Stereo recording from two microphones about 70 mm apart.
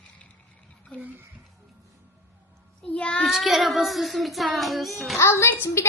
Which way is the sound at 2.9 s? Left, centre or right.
Centre.